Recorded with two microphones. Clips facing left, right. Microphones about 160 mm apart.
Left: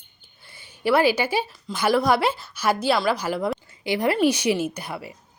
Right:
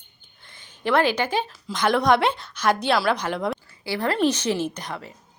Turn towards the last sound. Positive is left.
turn(degrees=10)  # may be behind; listen again after turning